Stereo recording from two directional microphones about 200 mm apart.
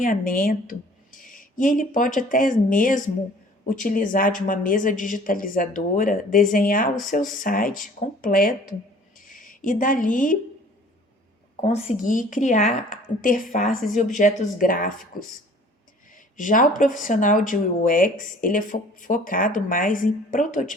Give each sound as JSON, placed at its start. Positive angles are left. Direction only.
{"t": 0.0, "sound": "speech", "side_deg": 45}
{"t": 9.1, "sound": "a sound", "side_deg": 40}
{"t": 11.9, "sound": "speech", "side_deg": 40}
{"t": 16.1, "sound": "speech", "side_deg": 40}